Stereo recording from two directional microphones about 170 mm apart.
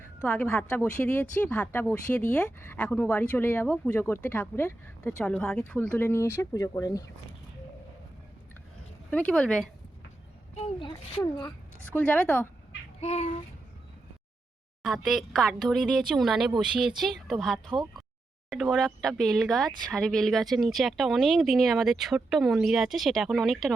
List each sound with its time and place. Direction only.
0.3 s speech: 10° left (ahead or behind)
9.0 s speech: 10° left (ahead or behind)
10.5 s a child's voice: 35° left (ahead or behind)
11.9 s speech: 5° left (ahead or behind)
13.0 s speech: 40° left (ahead or behind)
14.8 s speech: centre (ahead or behind)